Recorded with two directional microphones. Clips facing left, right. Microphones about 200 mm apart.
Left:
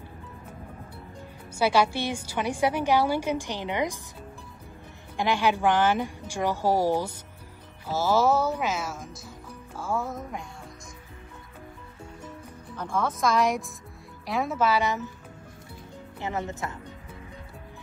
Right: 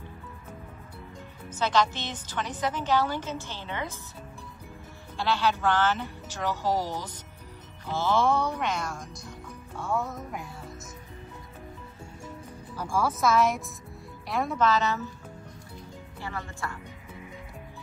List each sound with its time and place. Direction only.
1.5 s a woman's voice: 10° left (ahead or behind)
5.1 s a woman's voice: 15° left (ahead or behind)
12.7 s a woman's voice: 10° right (ahead or behind); by 15.0 s 15° left (ahead or behind)
16.2 s speech: 20° left (ahead or behind)